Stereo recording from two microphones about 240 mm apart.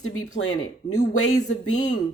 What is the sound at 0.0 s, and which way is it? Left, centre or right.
Speech, left.